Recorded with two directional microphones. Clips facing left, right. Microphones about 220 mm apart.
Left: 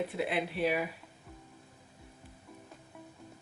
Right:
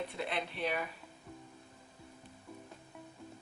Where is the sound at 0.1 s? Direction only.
5° left (ahead or behind).